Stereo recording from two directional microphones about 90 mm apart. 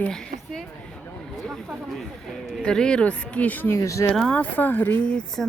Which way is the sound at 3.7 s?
35° left (ahead or behind).